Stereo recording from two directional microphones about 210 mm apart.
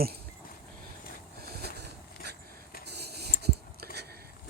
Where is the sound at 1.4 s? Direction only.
45° right (ahead or behind).